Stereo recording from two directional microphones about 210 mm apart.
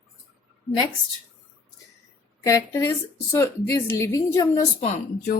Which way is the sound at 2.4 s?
15° left (ahead or behind).